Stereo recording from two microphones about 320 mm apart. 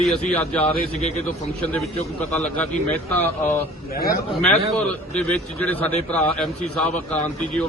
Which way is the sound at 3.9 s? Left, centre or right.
Left.